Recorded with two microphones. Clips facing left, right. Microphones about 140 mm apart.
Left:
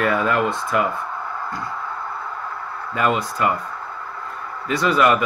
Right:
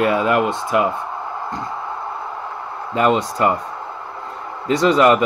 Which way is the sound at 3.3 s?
25° right (ahead or behind).